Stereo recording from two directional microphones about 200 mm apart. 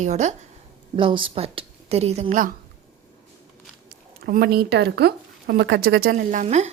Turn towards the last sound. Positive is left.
turn(degrees=-35)  # may be behind; listen again after turning